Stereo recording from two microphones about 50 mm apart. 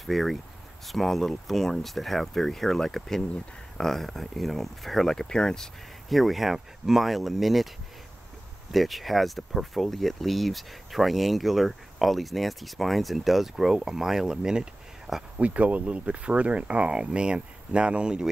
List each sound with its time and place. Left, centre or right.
0.0 s speech: centre
6.0 s speech: centre
8.7 s speech: centre
15.3 s speech: right